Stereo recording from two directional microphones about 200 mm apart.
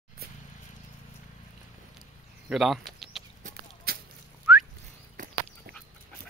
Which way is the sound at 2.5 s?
Centre (ahead or behind).